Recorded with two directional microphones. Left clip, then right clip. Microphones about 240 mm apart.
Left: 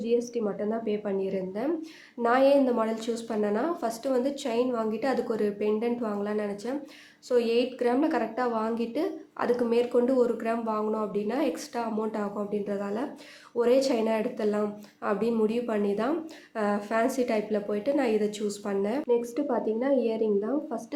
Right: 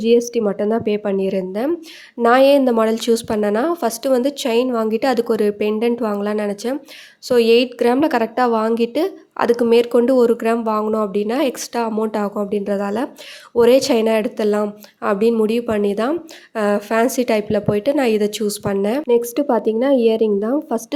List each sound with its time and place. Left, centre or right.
0.0 s a woman's voice: right